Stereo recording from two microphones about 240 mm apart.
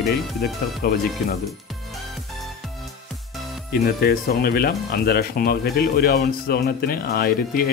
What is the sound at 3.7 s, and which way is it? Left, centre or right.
Speech, left.